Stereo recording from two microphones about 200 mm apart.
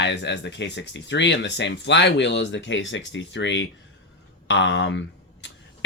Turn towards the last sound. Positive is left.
turn(degrees=65)  # may be behind; listen again after turning